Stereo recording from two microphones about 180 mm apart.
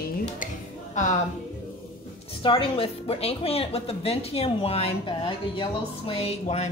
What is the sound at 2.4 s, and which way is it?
Speech, 30° left (ahead or behind).